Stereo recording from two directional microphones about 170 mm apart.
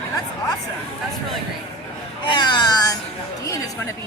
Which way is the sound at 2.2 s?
30° left (ahead or behind).